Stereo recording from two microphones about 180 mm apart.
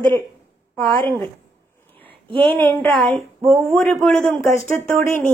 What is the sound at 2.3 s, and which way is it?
A woman's voice, 10° left (ahead or behind).